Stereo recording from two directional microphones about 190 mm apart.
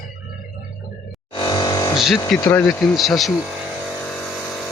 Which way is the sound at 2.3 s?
5° left (ahead or behind).